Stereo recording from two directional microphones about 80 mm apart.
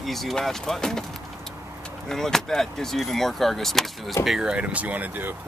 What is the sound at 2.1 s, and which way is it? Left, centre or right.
Speech, centre.